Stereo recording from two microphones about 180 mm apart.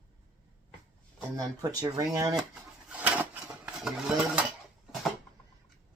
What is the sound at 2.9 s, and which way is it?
Dishes, 10° right (ahead or behind).